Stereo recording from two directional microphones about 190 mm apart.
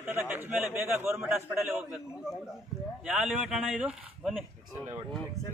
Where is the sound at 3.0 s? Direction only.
5° right (ahead or behind).